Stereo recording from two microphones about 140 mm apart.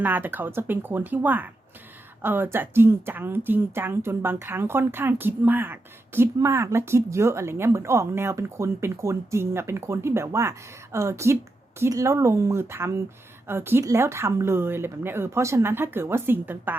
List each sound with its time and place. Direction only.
0.0 s speech: 15° right (ahead or behind)